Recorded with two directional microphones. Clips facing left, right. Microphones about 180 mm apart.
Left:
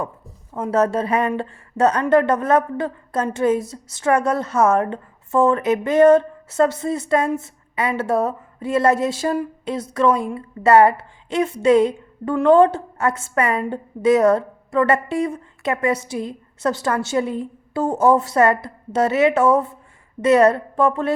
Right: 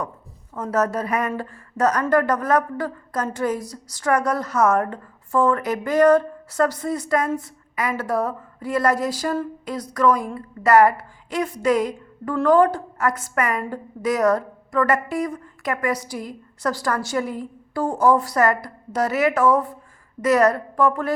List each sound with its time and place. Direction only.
0.5 s a woman's voice: 25° left (ahead or behind)